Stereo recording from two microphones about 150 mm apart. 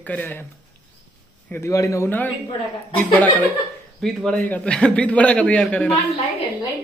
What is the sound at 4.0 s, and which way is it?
A man's voice, 5° left (ahead or behind).